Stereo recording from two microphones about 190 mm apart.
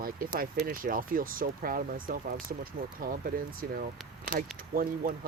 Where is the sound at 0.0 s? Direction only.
50° right (ahead or behind).